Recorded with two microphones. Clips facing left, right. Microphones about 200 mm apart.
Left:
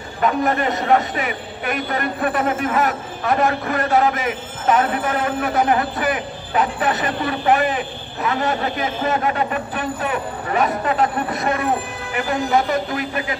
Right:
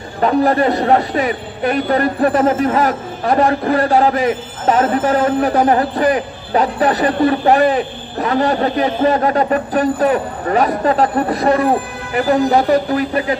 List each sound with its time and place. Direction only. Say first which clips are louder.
0.2 s a man's voice: right 6 dB; 35° right (ahead or behind)